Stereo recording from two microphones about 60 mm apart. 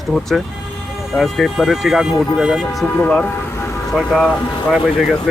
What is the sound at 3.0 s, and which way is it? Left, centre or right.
Speech, centre.